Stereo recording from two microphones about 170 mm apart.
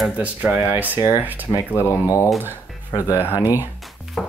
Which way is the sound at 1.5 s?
15° left (ahead or behind).